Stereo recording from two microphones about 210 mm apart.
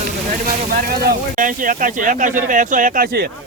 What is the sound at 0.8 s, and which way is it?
Speech, 45° right (ahead or behind).